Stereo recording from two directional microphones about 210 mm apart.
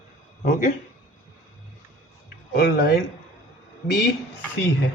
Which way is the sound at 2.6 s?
50° left (ahead or behind).